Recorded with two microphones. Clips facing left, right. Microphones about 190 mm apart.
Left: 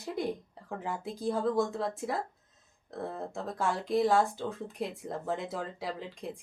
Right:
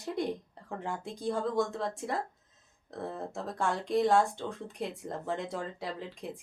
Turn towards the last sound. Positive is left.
turn(degrees=0)  # may be behind; listen again after turning